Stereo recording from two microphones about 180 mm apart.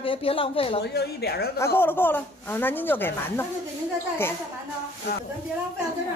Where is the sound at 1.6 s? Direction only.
15° left (ahead or behind).